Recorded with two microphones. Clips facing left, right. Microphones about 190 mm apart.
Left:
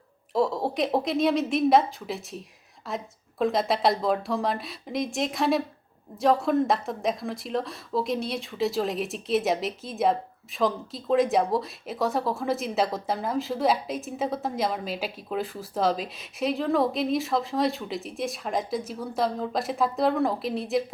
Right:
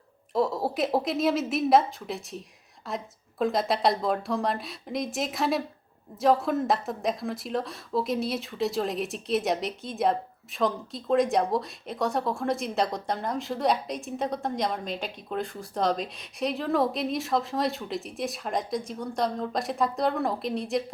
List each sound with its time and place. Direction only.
0.3 s a woman's voice: centre (ahead or behind)